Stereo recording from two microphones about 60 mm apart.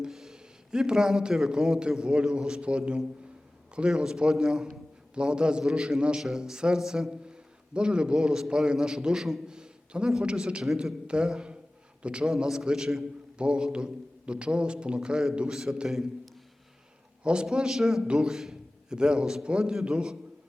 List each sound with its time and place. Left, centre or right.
0.0 s a man's voice: centre
17.2 s a man's voice: centre